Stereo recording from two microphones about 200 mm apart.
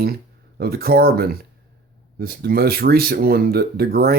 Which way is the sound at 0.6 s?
50° right (ahead or behind).